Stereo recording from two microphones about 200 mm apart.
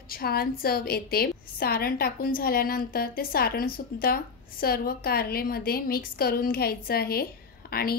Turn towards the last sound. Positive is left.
turn(degrees=50)  # may be behind; listen again after turning